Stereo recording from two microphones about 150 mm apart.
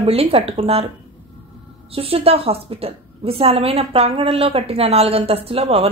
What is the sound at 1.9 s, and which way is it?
A woman's voice, 40° right (ahead or behind).